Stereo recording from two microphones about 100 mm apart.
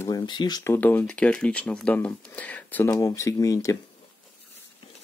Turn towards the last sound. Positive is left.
turn(degrees=35)  # may be behind; listen again after turning